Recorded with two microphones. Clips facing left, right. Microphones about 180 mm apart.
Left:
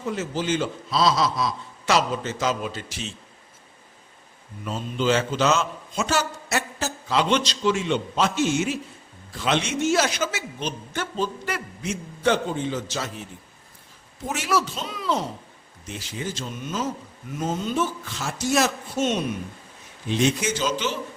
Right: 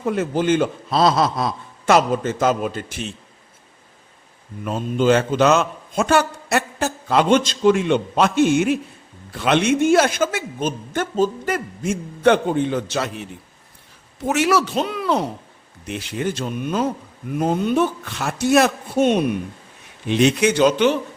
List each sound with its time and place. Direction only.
0.0 s a man's voice: 55° right (ahead or behind)
4.6 s a man's voice: 55° right (ahead or behind)